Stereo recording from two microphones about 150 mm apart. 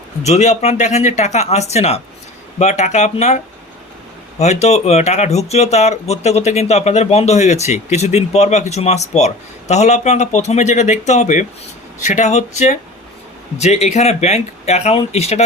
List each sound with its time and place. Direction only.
0.2 s speech: 50° left (ahead or behind)